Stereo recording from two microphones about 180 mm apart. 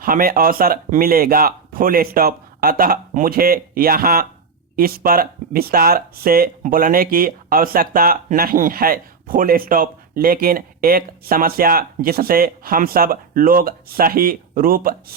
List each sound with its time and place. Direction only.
0.0 s speech: 50° right (ahead or behind)